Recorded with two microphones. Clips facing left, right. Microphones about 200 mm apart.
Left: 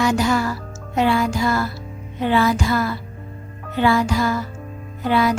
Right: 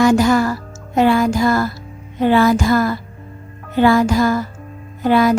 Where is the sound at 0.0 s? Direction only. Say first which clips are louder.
Right 6 dB; 50° right (ahead or behind).